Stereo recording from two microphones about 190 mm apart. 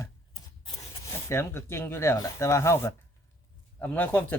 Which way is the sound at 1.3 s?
15° left (ahead or behind).